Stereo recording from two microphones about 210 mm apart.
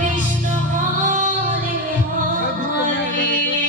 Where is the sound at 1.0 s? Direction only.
40° right (ahead or behind).